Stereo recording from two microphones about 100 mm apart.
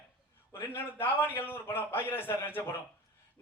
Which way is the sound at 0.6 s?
20° left (ahead or behind).